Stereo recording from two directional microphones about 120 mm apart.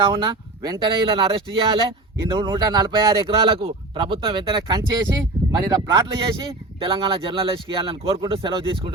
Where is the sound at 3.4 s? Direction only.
50° right (ahead or behind).